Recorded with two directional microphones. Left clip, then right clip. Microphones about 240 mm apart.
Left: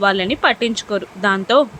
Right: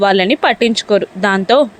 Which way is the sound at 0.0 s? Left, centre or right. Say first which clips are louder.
Right 4 dB; right.